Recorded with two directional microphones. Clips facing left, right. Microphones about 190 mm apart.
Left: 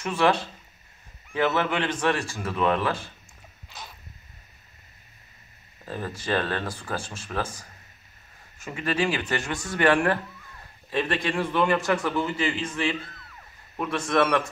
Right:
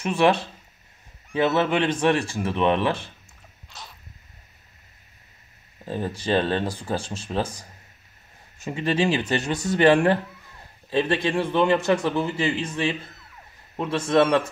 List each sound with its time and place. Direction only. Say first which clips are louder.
0.0 s a man's voice: right 3 dB; 20° right (ahead or behind)
3.6 s a sound: left 1 dB; centre (ahead or behind)
5.9 s a man's voice: right 4 dB; 20° right (ahead or behind)
8.6 s a man's voice: right 3 dB; 20° right (ahead or behind)